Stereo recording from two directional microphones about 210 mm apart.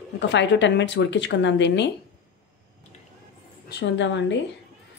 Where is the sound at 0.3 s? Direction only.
60° left (ahead or behind).